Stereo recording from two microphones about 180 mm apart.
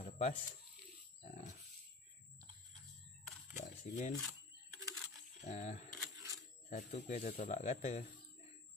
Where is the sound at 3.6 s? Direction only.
40° left (ahead or behind).